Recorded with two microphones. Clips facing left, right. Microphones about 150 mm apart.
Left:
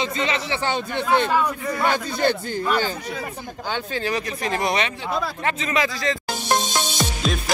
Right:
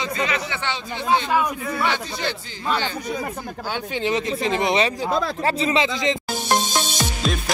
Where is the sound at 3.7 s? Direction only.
20° right (ahead or behind).